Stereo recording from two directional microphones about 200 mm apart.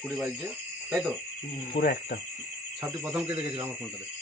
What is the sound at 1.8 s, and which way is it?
Speech, 50° left (ahead or behind).